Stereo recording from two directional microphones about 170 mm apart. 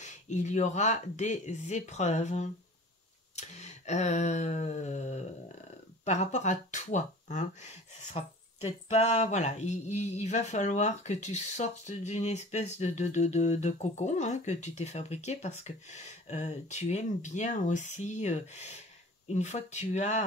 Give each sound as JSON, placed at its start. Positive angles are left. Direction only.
{"t": 0.0, "sound": "speech", "side_deg": 45}
{"t": 3.3, "sound": "a sound", "side_deg": 40}
{"t": 6.0, "sound": "speech", "side_deg": 45}